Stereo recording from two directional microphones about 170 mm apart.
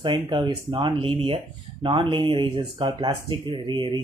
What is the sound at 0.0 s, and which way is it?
Speech, 25° right (ahead or behind).